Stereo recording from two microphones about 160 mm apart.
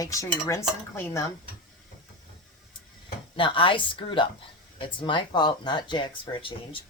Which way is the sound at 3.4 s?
35° left (ahead or behind).